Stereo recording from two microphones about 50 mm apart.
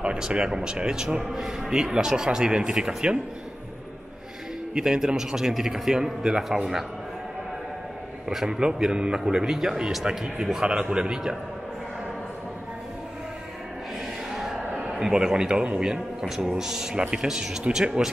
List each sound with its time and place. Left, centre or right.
0.0 s a man's voice: centre
4.7 s a man's voice: centre
8.3 s a man's voice: centre
15.0 s a man's voice: centre